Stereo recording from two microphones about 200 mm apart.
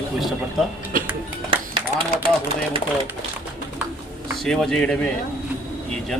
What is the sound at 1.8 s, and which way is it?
Speech, 30° right (ahead or behind).